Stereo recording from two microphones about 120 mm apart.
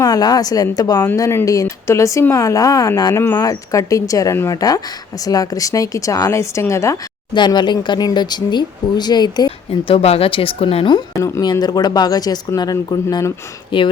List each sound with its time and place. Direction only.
0.0 s speech: 35° left (ahead or behind)
7.3 s speech: 40° left (ahead or behind)
9.8 s speech: 55° left (ahead or behind)
10.9 s speech: 35° left (ahead or behind)